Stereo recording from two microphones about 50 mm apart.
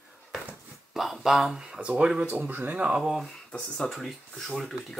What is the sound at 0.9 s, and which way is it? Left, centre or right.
Speech, centre.